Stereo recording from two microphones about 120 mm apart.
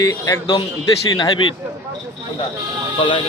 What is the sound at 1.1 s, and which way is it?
Speech, 45° left (ahead or behind).